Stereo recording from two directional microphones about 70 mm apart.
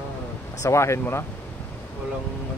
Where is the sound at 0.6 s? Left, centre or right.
Left.